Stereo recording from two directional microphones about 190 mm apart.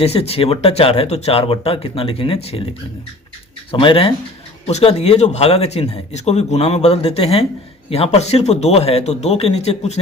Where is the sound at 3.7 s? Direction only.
30° left (ahead or behind).